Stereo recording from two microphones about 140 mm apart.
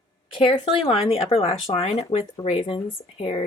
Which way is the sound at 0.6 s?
45° left (ahead or behind).